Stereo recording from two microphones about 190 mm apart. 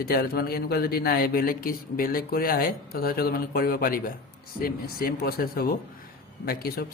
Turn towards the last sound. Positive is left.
turn(degrees=55)  # may be behind; listen again after turning